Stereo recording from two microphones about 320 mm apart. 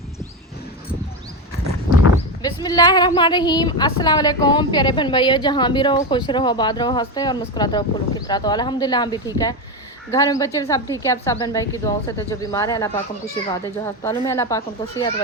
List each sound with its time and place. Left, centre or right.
2.4 s speech: centre